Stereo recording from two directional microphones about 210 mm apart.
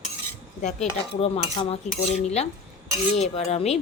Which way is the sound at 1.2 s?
30° left (ahead or behind).